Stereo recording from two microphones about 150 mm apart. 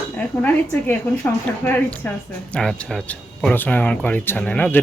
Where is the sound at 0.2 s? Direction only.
10° left (ahead or behind).